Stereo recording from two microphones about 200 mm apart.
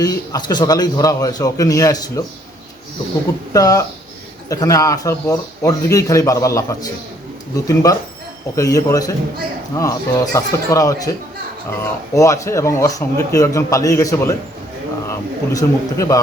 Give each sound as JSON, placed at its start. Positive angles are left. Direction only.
{"t": 0.0, "sound": "speech", "side_deg": 20}
{"t": 3.5, "sound": "speech", "side_deg": 15}
{"t": 15.5, "sound": "speech", "side_deg": 15}